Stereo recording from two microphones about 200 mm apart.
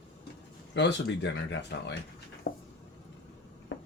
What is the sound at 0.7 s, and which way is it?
Speech, 60° left (ahead or behind).